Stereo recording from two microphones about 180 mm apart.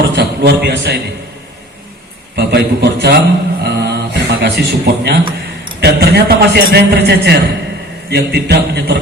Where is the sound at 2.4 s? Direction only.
65° right (ahead or behind).